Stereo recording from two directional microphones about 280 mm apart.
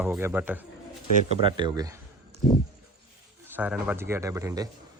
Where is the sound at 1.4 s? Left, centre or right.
Centre.